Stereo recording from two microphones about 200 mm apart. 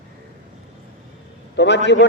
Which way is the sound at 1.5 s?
60° left (ahead or behind).